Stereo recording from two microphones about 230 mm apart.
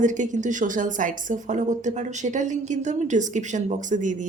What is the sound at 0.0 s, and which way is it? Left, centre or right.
A woman's voice, right.